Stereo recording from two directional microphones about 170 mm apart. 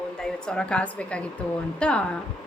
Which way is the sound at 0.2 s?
5° left (ahead or behind).